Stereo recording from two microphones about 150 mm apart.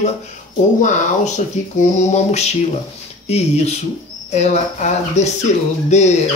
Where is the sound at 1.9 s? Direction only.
50° left (ahead or behind).